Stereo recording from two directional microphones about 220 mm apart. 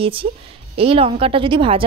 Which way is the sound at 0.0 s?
25° right (ahead or behind).